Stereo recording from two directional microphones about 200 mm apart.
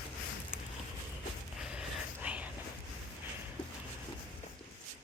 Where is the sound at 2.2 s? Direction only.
5° right (ahead or behind).